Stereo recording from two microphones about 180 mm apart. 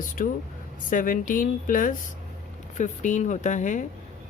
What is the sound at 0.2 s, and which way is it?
Speech, 50° left (ahead or behind).